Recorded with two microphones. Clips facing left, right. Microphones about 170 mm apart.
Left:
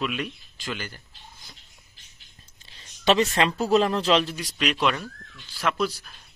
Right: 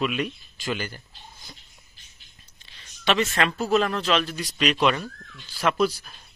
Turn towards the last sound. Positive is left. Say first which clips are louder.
# right 3 dB
turn(degrees=-5)  # may be behind; listen again after turning